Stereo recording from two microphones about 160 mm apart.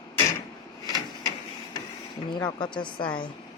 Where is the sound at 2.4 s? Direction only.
25° left (ahead or behind).